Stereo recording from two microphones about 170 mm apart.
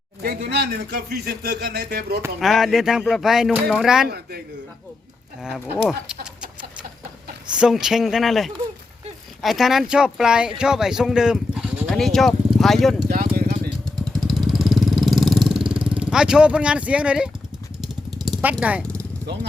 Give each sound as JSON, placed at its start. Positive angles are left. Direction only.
{"t": 0.2, "sound": "speech", "side_deg": -60}
{"t": 2.4, "sound": "speech", "side_deg": 0}
{"t": 4.1, "sound": "speech", "side_deg": -65}
{"t": 5.4, "sound": "speech", "side_deg": -5}
{"t": 6.1, "sound": "a sound", "side_deg": -50}
{"t": 7.5, "sound": "speech", "side_deg": -5}
{"t": 13.1, "sound": "vehicle", "side_deg": -60}
{"t": 14.0, "sound": "vehicle", "side_deg": 0}
{"t": 18.4, "sound": "speech", "side_deg": -10}
{"t": 18.8, "sound": "vehicle", "side_deg": 5}
{"t": 19.2, "sound": "speech", "side_deg": -85}